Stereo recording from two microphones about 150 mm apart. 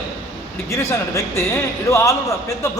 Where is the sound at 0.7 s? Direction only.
20° left (ahead or behind).